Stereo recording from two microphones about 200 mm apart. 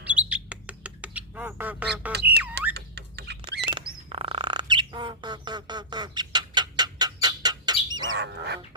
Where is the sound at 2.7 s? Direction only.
55° right (ahead or behind).